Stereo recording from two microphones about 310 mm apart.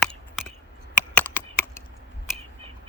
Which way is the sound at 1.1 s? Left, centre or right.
Centre.